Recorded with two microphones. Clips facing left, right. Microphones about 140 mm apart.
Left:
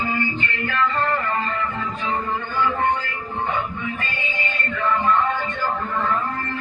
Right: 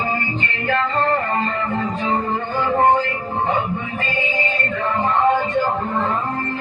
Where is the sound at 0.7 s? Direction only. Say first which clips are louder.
Right 4 dB; 35° right (ahead or behind).